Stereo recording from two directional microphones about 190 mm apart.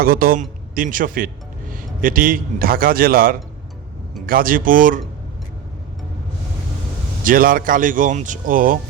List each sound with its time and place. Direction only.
0.0 s a man's voice: 50° right (ahead or behind)
7.3 s a man's voice: 50° right (ahead or behind)